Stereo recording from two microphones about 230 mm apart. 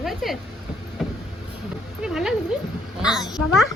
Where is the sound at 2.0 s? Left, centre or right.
Centre.